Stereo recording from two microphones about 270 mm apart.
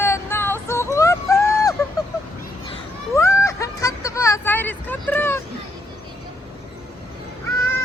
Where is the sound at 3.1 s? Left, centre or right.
Centre.